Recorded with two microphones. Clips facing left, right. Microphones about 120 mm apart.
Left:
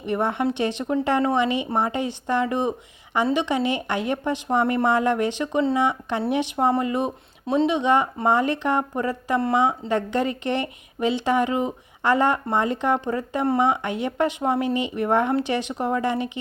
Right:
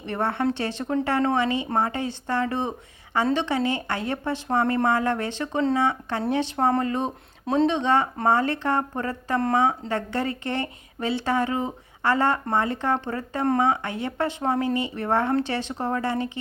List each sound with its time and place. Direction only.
0.0 s speech: 15° left (ahead or behind)